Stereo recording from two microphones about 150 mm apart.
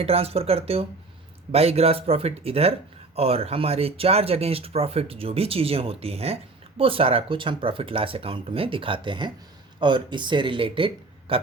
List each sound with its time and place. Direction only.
0.0 s speech: 40° right (ahead or behind)